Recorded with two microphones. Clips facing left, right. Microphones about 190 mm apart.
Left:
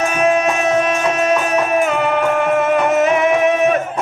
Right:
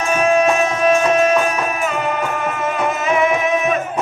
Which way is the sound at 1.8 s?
65° left (ahead or behind).